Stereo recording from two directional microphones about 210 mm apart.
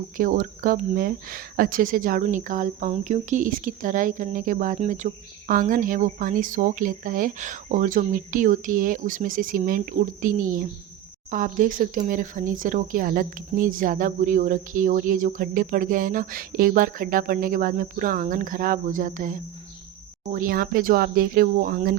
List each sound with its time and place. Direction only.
0.2 s speech: 40° right (ahead or behind)